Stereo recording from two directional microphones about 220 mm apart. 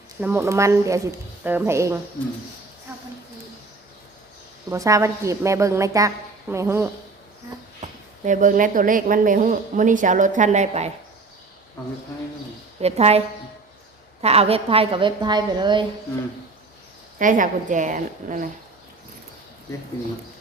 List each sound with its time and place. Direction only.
0.2 s a woman's voice: 10° right (ahead or behind)
4.7 s a woman's voice: 15° right (ahead or behind)
7.8 s a woman's voice: 35° right (ahead or behind)
12.8 s a woman's voice: 30° right (ahead or behind)
17.2 s a woman's voice: 35° right (ahead or behind)